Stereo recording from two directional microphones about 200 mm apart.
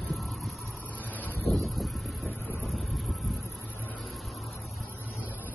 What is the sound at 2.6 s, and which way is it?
Vehicle, centre (ahead or behind).